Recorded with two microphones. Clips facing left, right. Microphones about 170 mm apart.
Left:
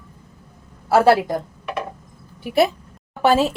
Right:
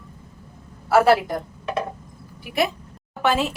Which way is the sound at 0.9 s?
30° left (ahead or behind).